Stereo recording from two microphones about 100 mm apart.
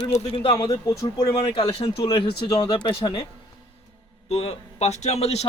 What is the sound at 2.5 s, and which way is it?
Speech, 40° left (ahead or behind).